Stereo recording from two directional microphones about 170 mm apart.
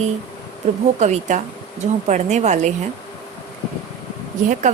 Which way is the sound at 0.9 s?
45° right (ahead or behind).